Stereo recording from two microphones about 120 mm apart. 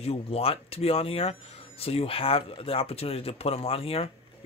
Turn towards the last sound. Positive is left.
turn(degrees=50)  # may be behind; listen again after turning